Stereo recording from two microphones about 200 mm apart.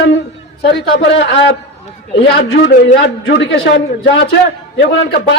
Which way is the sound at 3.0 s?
65° left (ahead or behind).